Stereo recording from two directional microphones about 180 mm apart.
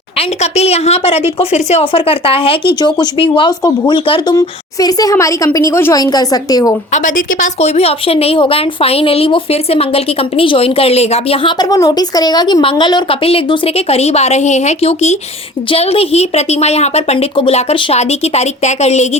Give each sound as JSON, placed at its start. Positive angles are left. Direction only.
{"t": 0.2, "sound": "a woman's voice", "side_deg": 35}
{"t": 6.9, "sound": "speech", "side_deg": 45}